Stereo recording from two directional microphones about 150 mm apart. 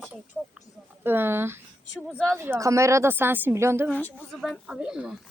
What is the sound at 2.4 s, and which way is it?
Speech, 15° right (ahead or behind).